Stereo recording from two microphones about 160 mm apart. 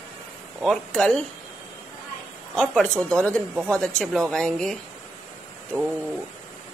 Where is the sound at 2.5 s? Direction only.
5° left (ahead or behind).